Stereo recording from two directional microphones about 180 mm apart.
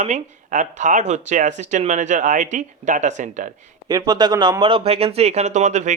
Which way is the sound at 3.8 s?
20° right (ahead or behind).